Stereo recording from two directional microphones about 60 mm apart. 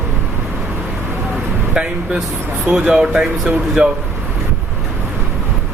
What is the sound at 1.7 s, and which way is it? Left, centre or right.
Speech, centre.